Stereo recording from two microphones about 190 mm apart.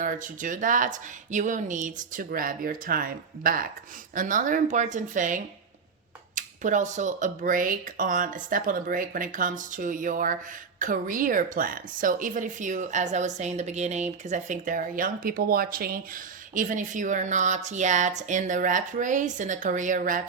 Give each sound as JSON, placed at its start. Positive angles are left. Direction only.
{"t": 0.0, "sound": "a woman's voice", "side_deg": -45}